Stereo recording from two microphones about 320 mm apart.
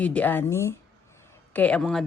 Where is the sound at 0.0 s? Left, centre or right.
Centre.